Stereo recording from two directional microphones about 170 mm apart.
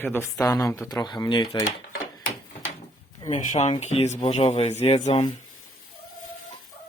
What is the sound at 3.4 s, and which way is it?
Speech, 45° left (ahead or behind).